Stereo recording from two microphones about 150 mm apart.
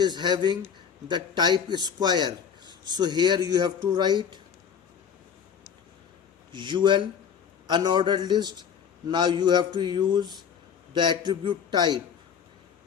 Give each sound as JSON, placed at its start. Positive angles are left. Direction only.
{"t": 0.0, "sound": "a man's voice", "side_deg": -30}
{"t": 6.5, "sound": "a man's voice", "side_deg": -30}